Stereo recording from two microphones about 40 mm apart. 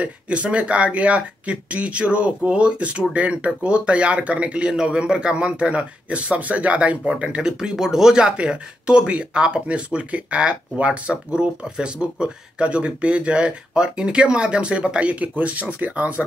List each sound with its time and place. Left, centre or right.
0.0 s speech: right
7.7 s speech: centre
8.2 s speech: right